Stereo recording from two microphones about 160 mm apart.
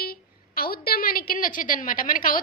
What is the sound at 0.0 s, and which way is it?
A woman's voice, 70° left (ahead or behind).